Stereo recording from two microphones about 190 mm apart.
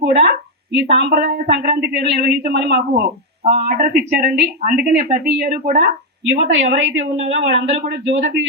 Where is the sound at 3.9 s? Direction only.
55° right (ahead or behind).